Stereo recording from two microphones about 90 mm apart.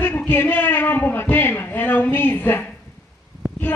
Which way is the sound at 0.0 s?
20° left (ahead or behind).